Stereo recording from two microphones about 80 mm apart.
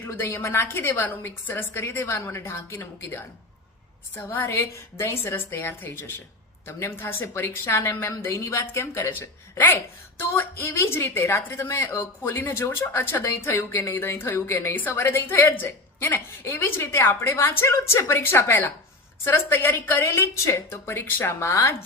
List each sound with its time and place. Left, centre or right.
0.0 s a woman's voice: left